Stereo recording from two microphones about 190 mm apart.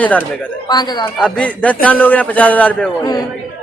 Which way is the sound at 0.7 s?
20° left (ahead or behind).